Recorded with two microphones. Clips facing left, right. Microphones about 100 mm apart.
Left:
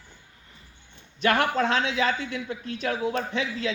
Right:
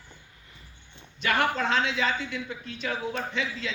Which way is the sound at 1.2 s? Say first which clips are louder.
Left 3 dB; 45° left (ahead or behind).